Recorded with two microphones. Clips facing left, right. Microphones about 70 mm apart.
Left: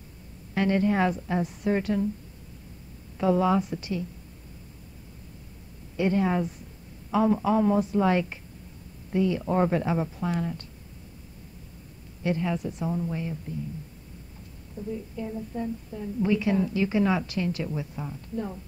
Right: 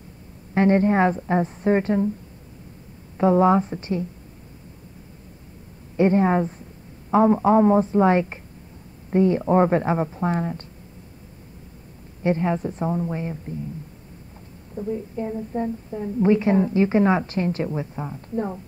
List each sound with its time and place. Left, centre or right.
0.6 s a woman's voice: right
3.2 s a woman's voice: right
5.9 s a woman's voice: right
12.2 s a woman's voice: right
14.8 s a woman's voice: right